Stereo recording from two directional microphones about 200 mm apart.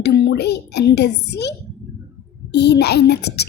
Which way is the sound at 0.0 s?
55° left (ahead or behind).